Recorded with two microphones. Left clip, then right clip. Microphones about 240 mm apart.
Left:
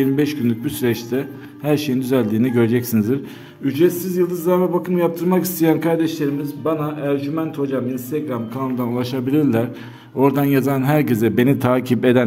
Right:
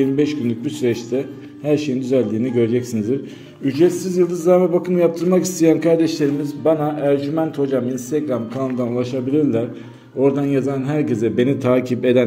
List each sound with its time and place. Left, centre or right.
0.0 s a man's voice: left
3.6 s a man's voice: centre
8.9 s a man's voice: left